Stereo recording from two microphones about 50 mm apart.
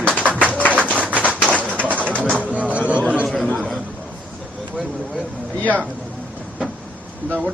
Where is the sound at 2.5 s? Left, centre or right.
Right.